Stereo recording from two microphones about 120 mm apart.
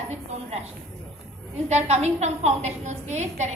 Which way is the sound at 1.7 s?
70° right (ahead or behind).